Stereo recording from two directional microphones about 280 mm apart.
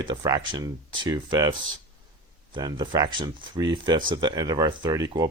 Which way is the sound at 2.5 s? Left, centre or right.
Centre.